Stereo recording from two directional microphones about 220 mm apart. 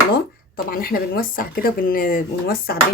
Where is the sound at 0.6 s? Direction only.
40° left (ahead or behind).